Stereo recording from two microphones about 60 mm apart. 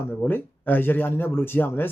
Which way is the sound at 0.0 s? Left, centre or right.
Left.